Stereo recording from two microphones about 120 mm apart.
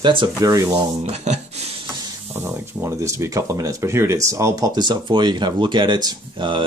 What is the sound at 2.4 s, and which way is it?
Speech, 20° right (ahead or behind).